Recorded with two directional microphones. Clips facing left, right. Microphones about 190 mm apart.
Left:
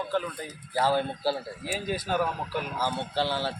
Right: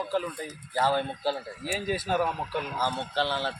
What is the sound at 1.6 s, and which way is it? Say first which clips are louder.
Speech: right 1 dB; centre (ahead or behind).